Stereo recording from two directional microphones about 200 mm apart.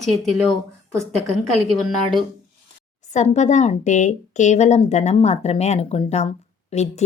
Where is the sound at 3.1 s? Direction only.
35° left (ahead or behind).